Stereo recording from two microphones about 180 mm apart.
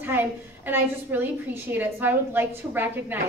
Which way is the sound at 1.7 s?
10° right (ahead or behind).